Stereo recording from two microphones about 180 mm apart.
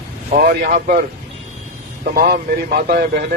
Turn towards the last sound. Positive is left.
turn(degrees=-55)  # may be behind; listen again after turning